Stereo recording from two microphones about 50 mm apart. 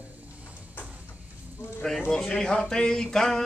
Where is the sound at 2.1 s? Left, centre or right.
Centre.